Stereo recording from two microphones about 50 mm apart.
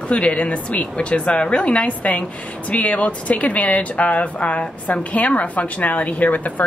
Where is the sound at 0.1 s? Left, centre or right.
Left.